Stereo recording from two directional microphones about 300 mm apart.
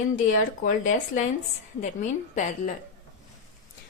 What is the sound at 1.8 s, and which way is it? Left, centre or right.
Speech, left.